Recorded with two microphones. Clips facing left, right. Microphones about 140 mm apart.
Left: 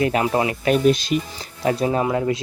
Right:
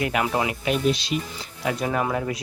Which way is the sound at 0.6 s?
45° left (ahead or behind).